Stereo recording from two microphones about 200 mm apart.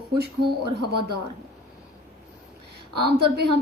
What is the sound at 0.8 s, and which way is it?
Speech, 55° right (ahead or behind).